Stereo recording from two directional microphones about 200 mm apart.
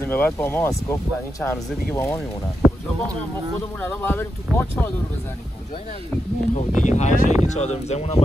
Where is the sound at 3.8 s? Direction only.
10° left (ahead or behind).